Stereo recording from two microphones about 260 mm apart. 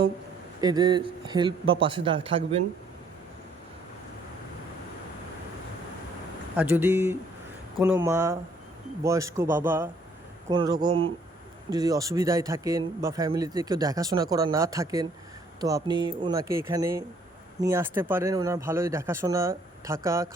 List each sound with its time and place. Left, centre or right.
0.6 s speech: centre
6.6 s speech: centre